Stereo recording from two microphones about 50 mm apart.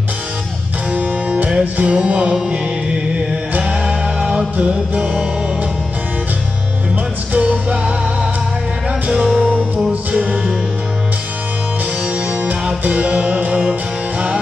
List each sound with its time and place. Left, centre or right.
0.9 s music: right
7.3 s music: right
9.0 s music: right
12.8 s music: right